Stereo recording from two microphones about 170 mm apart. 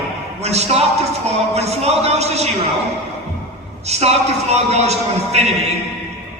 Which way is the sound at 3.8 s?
40° right (ahead or behind).